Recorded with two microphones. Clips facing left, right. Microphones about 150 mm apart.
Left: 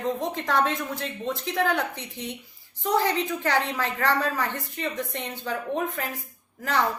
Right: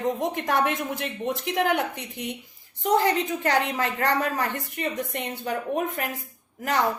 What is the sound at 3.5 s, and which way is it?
A woman's voice, 15° right (ahead or behind).